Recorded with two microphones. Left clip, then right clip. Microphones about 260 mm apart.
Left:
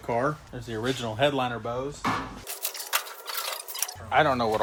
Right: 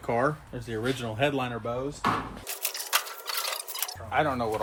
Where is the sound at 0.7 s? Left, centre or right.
Centre.